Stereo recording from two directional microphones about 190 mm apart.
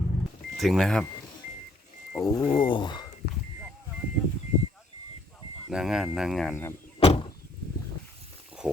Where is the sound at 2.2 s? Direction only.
20° left (ahead or behind).